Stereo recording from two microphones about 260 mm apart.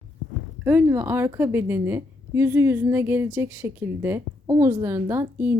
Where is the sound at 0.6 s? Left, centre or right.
Centre.